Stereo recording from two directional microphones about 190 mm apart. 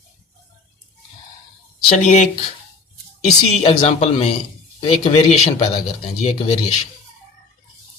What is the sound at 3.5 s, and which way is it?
Speech, 30° left (ahead or behind).